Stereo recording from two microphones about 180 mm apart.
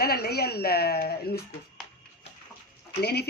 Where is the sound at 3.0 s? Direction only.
65° left (ahead or behind).